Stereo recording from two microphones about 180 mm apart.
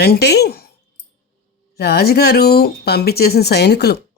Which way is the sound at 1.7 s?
60° left (ahead or behind).